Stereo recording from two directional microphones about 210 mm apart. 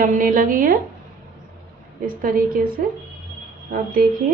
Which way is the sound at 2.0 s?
40° right (ahead or behind).